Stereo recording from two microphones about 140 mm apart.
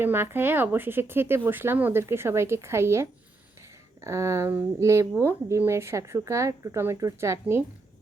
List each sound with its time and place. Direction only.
0.0 s speech: 15° right (ahead or behind)